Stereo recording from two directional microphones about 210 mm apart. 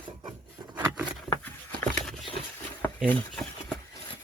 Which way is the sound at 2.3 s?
5° left (ahead or behind).